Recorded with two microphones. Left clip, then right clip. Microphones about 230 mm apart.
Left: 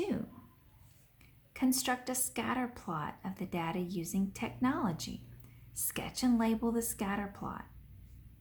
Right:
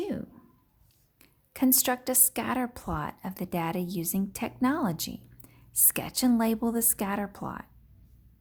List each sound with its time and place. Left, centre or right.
1.2 s a woman's voice: right